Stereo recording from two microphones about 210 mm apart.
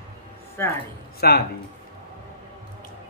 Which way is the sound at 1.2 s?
45° left (ahead or behind).